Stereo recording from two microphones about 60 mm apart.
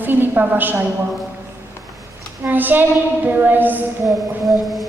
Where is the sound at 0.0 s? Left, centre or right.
Right.